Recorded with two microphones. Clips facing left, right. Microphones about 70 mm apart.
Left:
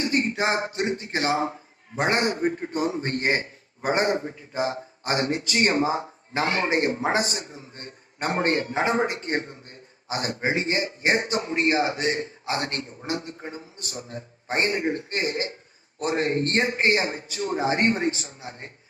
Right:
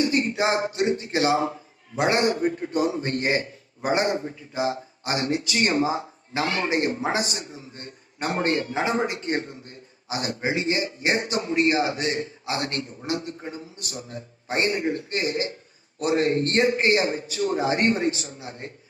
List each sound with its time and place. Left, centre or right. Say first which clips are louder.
0.0 s a man's voice: right 2 dB; left